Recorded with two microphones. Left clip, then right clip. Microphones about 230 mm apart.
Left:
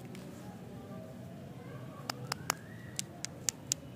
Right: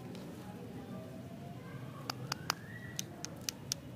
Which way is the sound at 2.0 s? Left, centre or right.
Centre.